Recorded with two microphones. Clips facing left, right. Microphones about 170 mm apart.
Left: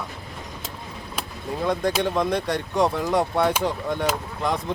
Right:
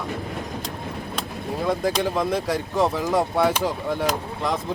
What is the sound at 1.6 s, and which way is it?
Speech, 5° right (ahead or behind).